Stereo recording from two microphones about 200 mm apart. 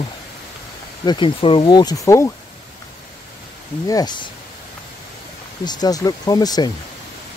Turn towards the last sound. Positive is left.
turn(degrees=20)  # may be behind; listen again after turning